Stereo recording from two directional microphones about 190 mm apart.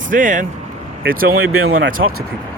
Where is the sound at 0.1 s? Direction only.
45° right (ahead or behind).